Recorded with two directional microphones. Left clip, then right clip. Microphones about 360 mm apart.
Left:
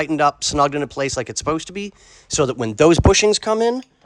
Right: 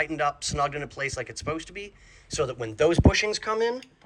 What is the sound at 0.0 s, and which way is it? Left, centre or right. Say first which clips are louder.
Speech: left 9 dB; centre.